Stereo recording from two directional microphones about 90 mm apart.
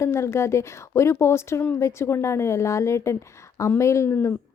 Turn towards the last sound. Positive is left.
turn(degrees=30)  # may be behind; listen again after turning